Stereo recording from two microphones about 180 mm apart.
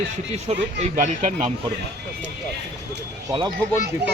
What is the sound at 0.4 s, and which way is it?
Speech, 40° right (ahead or behind).